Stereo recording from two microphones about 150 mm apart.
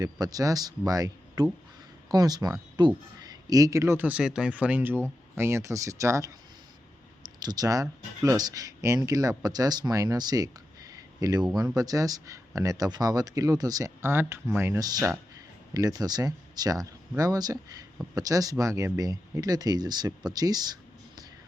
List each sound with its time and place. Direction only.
0.0 s speech: 25° right (ahead or behind)